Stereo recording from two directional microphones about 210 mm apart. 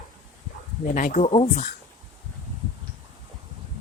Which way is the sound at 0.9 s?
35° left (ahead or behind).